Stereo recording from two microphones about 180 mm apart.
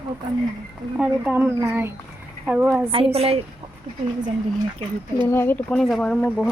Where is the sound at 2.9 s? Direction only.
35° right (ahead or behind).